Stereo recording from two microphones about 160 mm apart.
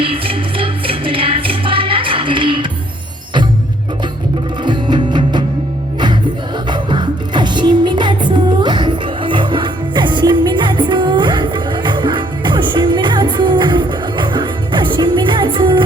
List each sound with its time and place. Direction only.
0.0 s music: 35° right (ahead or behind)
4.6 s music: 30° right (ahead or behind)
6.7 s music: 30° right (ahead or behind)